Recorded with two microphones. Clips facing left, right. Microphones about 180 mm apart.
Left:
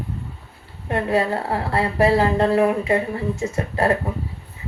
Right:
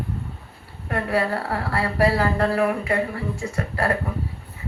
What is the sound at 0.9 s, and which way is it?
Speech, 25° left (ahead or behind).